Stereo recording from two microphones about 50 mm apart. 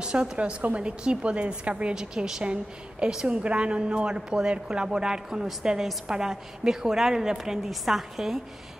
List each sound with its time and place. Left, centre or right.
0.0 s a woman's voice: centre